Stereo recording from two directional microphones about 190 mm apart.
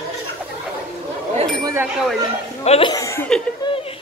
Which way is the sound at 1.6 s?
15° right (ahead or behind).